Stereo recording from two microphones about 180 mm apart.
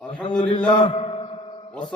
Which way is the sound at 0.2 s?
25° left (ahead or behind).